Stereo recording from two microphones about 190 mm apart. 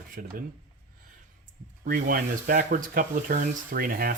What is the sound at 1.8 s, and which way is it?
Speech, 45° right (ahead or behind).